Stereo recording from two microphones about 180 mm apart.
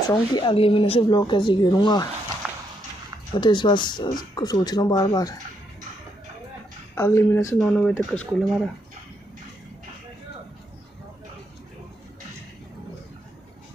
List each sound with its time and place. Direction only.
0.1 s speech: 25° left (ahead or behind)
3.3 s speech: 25° left (ahead or behind)
7.0 s speech: 15° left (ahead or behind)